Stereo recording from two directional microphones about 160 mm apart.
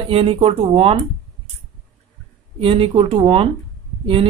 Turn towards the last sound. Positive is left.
turn(degrees=-35)  # may be behind; listen again after turning